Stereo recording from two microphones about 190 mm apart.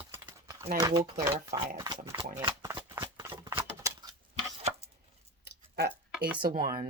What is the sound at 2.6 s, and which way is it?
Shuffling cards, 15° right (ahead or behind).